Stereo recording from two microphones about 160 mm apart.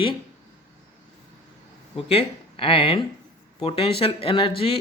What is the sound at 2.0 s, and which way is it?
Speech, 35° left (ahead or behind).